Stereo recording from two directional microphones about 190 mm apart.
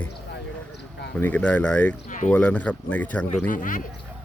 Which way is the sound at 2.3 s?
5° left (ahead or behind).